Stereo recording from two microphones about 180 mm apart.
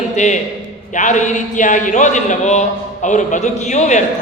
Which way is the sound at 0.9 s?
45° left (ahead or behind).